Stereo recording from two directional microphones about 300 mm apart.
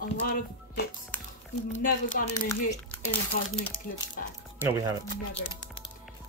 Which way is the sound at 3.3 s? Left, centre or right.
Left.